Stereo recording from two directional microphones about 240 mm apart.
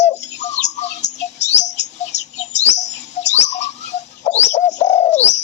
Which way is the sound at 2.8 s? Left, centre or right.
Left.